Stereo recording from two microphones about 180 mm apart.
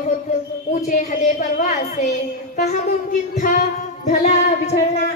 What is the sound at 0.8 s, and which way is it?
A woman's voice, 45° left (ahead or behind).